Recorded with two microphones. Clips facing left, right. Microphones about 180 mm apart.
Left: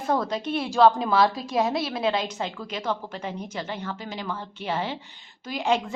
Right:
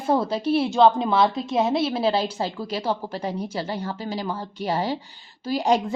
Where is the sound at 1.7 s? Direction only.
25° right (ahead or behind).